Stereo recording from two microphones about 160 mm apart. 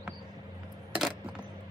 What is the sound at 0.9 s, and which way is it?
Coin, 5° right (ahead or behind).